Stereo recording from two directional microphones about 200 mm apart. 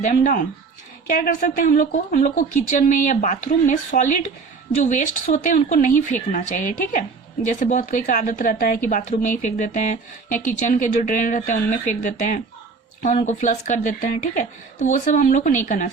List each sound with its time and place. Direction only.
0.0 s speech: 40° left (ahead or behind)
7.6 s speech: 40° left (ahead or behind)